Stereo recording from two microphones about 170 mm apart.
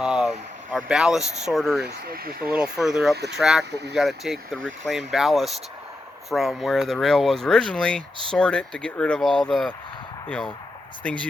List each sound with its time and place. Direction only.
0.0 s speech: 5° right (ahead or behind)
2.0 s speech: 60° right (ahead or behind)
2.5 s speech: 5° right (ahead or behind)
3.7 s speech: 80° right
3.9 s speech: centre (ahead or behind)